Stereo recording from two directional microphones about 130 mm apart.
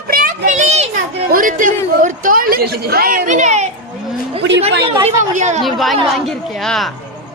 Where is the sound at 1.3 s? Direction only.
90° right; by 3.7 s 65° right (ahead or behind).